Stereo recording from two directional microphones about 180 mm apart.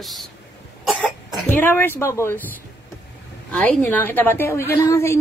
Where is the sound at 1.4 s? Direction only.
10° left (ahead or behind).